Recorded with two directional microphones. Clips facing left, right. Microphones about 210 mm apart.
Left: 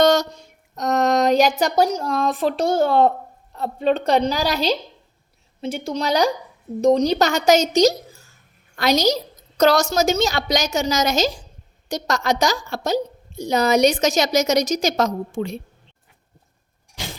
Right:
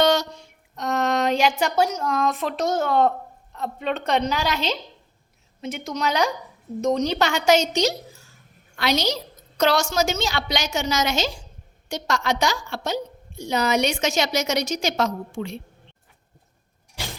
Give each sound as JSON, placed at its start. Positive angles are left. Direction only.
{"t": 0.0, "sound": "a woman's voice", "side_deg": 45}